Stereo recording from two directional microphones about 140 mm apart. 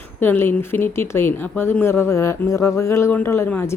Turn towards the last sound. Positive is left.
turn(degrees=15)  # may be behind; listen again after turning